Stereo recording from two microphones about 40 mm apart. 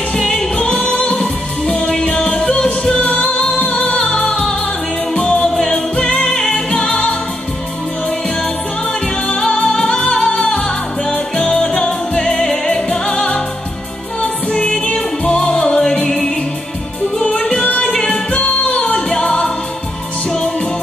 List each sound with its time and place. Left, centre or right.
0.2 s music: centre
0.6 s music: left
3.6 s music: left
4.3 s music: centre
9.3 s music: left